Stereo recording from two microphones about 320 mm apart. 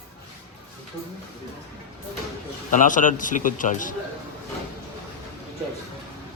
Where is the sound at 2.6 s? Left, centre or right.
Left.